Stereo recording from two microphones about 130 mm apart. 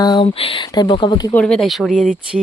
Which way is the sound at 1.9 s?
90° right.